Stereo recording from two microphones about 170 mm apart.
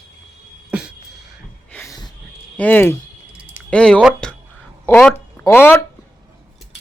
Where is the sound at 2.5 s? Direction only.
10° left (ahead or behind).